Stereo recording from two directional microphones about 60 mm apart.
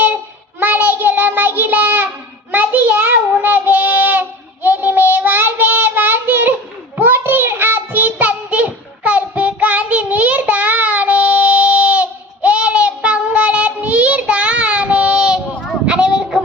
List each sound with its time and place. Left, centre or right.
0.6 s child singing: right; by 16.4 s centre